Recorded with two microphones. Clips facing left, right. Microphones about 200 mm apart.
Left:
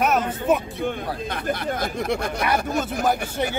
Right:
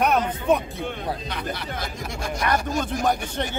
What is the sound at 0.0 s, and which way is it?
Speech, centre (ahead or behind).